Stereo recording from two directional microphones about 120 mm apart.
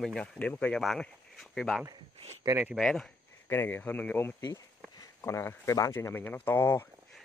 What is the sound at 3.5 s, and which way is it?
Speech, 20° left (ahead or behind).